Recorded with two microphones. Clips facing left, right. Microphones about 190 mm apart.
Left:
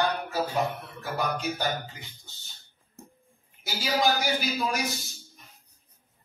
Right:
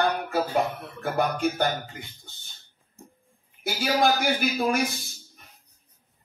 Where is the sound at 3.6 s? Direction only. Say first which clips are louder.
Right 3 dB; 55° right (ahead or behind).